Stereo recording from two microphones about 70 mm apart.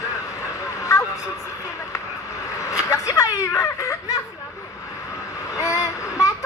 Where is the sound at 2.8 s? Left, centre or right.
Left.